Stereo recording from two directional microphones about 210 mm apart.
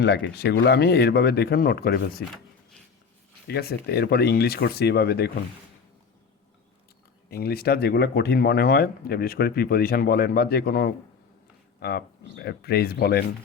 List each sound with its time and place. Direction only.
0.0 s speech: 55° left (ahead or behind)
3.4 s speech: 50° left (ahead or behind)
7.3 s speech: 45° left (ahead or behind)